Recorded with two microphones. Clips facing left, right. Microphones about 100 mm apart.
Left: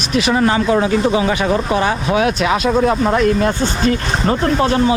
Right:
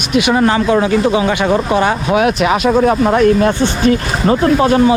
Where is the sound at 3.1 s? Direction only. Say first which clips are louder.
Right 4 dB; 40° right (ahead or behind).